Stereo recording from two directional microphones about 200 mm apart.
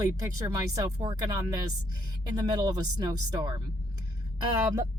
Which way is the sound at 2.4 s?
20° right (ahead or behind).